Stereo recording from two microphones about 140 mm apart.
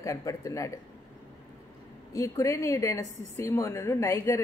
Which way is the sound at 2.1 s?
20° left (ahead or behind).